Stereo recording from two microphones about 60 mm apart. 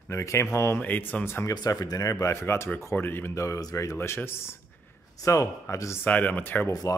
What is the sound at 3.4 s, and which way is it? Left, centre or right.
Speech, left.